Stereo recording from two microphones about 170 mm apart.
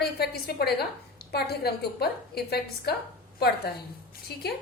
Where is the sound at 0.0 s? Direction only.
65° left (ahead or behind).